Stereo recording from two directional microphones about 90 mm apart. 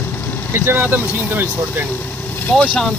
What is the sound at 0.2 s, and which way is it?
Vehicle, 20° left (ahead or behind).